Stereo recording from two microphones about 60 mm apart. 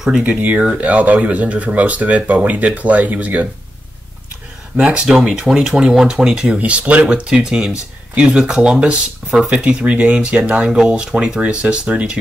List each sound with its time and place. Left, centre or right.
0.2 s speech: right
4.7 s speech: right